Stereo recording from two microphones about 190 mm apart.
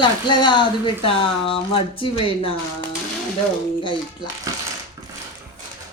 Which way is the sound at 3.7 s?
25° left (ahead or behind).